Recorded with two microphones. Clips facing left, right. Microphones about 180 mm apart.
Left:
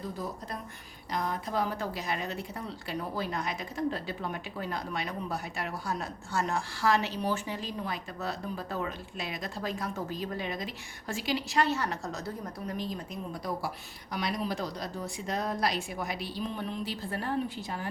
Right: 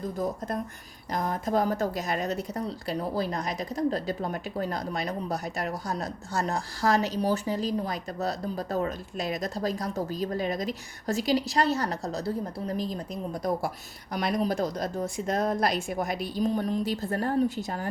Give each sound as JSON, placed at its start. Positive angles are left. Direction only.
{"t": 0.2, "sound": "a woman's voice", "side_deg": -45}